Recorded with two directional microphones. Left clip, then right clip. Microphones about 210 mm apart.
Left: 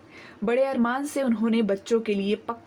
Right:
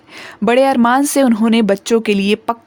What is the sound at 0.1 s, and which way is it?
Speech, 55° right (ahead or behind).